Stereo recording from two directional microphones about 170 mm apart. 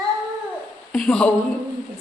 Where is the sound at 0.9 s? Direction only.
5° left (ahead or behind).